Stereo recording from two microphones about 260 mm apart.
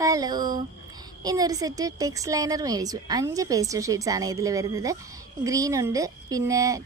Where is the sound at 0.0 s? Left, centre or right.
Centre.